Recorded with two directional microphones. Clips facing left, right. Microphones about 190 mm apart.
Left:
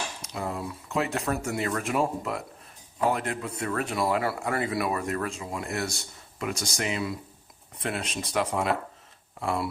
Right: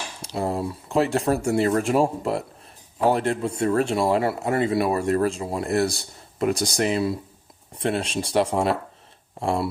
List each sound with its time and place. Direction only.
0.2 s speech: 35° right (ahead or behind)